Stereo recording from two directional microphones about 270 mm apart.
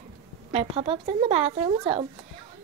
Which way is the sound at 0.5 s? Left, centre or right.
Right.